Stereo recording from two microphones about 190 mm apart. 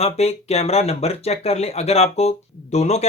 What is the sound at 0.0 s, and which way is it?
Speech, 35° left (ahead or behind).